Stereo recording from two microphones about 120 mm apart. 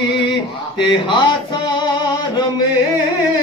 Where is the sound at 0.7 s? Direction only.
40° left (ahead or behind).